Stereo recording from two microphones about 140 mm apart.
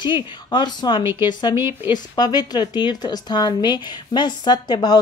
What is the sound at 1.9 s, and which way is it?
Speech, 30° left (ahead or behind).